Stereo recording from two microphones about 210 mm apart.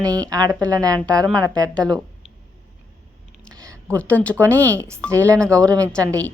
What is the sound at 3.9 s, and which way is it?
Speech, 5° left (ahead or behind).